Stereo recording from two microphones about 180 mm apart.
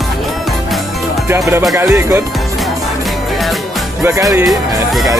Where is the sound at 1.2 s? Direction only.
15° right (ahead or behind).